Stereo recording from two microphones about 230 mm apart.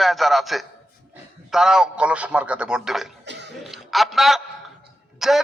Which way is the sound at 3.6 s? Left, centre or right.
Centre.